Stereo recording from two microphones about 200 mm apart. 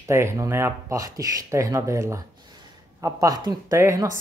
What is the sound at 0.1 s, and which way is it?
Speech, 15° right (ahead or behind).